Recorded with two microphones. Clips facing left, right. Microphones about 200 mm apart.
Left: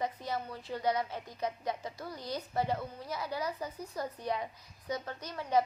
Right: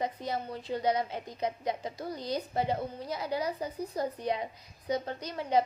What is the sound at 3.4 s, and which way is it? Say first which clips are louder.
Speech: right 4 dB; 35° right (ahead or behind).